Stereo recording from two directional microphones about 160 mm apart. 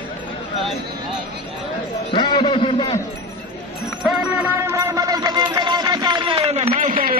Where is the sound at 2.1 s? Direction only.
25° left (ahead or behind).